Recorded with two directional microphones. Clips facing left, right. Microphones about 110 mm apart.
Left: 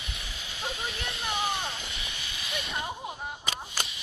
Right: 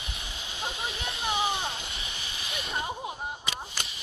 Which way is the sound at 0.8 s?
Centre (ahead or behind).